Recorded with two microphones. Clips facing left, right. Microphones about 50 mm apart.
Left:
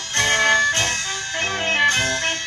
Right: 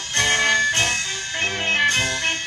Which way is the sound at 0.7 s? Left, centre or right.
Right.